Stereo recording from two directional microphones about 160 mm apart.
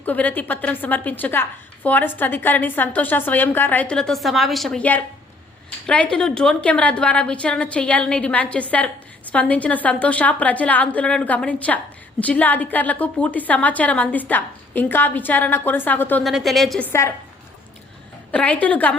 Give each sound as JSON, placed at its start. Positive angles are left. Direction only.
{"t": 0.0, "sound": "a woman's voice", "side_deg": 10}
{"t": 16.2, "sound": "a woman's voice", "side_deg": 0}
{"t": 16.9, "sound": "a woman's voice", "side_deg": 15}
{"t": 18.3, "sound": "a woman's voice", "side_deg": 10}